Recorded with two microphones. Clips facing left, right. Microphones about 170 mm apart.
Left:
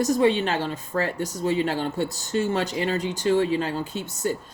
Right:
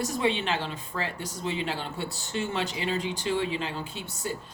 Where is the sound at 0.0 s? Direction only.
45° left (ahead or behind).